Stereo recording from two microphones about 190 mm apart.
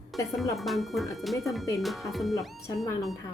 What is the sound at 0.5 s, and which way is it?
Speech, centre (ahead or behind).